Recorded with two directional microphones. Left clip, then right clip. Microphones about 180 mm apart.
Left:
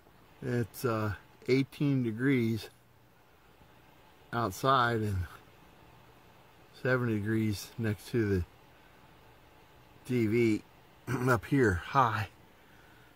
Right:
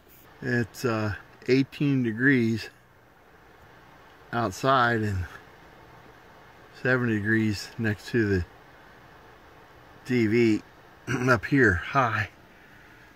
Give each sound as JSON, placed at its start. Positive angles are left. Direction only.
{"t": 0.5, "sound": "speech", "side_deg": 15}
{"t": 4.3, "sound": "speech", "side_deg": 15}
{"t": 6.8, "sound": "speech", "side_deg": 15}
{"t": 10.0, "sound": "speech", "side_deg": 15}